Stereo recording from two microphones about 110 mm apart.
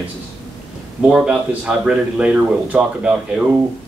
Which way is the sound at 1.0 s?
5° right (ahead or behind).